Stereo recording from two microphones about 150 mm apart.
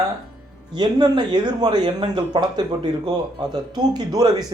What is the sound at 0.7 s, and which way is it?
Speech, 30° right (ahead or behind).